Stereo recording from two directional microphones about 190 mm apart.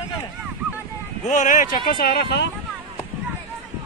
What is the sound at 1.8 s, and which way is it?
Speech, 55° left (ahead or behind).